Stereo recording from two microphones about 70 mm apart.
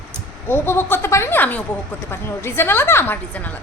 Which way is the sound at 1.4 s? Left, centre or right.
Left.